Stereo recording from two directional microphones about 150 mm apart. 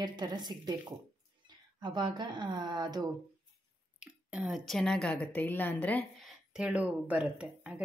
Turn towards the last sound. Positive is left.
turn(degrees=-5)  # may be behind; listen again after turning